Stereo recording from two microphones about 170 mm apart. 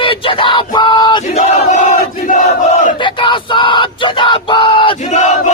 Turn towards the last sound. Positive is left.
turn(degrees=45)  # may be behind; listen again after turning